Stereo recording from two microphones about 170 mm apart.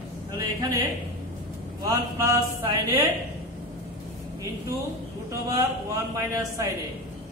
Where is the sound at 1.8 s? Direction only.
20° right (ahead or behind).